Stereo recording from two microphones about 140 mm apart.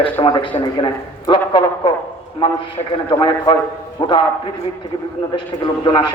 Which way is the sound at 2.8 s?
40° left (ahead or behind).